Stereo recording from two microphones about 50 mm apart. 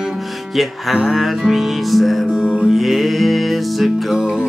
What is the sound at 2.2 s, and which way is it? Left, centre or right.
Music, centre.